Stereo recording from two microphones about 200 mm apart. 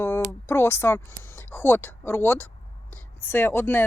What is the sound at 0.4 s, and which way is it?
A woman's voice, 10° left (ahead or behind).